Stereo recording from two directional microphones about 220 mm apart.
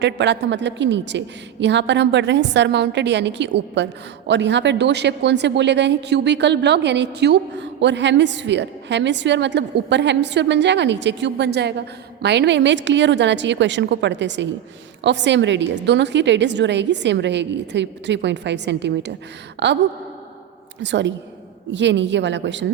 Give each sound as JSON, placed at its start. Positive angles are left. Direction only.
{"t": 0.0, "sound": "speech", "side_deg": -55}
{"t": 20.8, "sound": "speech", "side_deg": -55}